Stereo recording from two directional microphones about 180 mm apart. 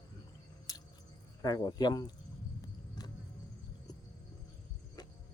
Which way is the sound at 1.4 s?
20° left (ahead or behind).